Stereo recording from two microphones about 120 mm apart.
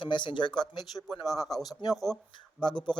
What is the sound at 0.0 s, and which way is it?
Speech, 40° left (ahead or behind).